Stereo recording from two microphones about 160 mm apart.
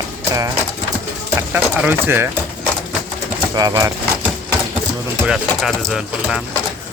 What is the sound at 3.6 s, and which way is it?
Speech, 20° right (ahead or behind).